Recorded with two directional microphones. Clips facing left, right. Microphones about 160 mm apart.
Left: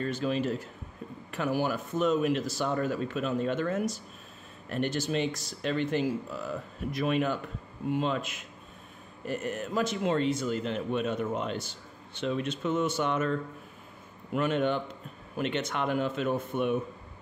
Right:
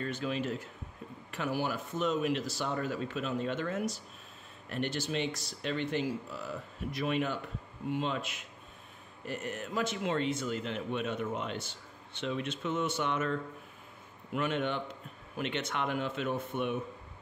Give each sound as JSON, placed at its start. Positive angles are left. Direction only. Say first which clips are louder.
{"t": 0.0, "sound": "speech", "louder": "left 5 dB", "side_deg": 35}